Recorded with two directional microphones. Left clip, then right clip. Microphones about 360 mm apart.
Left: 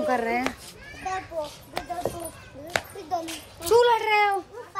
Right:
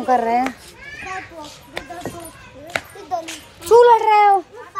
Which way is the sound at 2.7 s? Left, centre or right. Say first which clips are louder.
Right 4 dB; centre.